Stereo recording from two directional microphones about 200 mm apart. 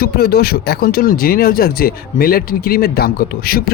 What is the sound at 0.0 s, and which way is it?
Speech, 50° left (ahead or behind).